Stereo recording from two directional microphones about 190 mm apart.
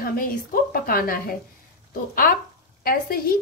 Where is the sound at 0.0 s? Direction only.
50° left (ahead or behind).